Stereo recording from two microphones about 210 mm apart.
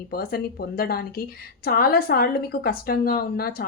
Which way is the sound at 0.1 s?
45° left (ahead or behind).